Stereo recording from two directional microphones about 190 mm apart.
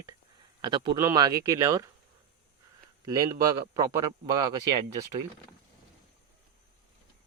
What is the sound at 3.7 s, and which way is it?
Speech, 15° right (ahead or behind).